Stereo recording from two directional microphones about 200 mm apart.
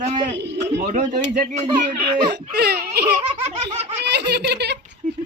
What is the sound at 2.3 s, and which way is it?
Speech, 55° right (ahead or behind).